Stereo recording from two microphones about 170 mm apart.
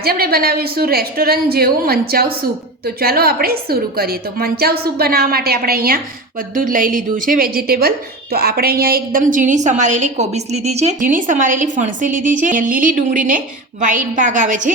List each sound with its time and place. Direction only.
0.0 s a woman's voice: 65° right (ahead or behind); by 14.7 s 50° right (ahead or behind)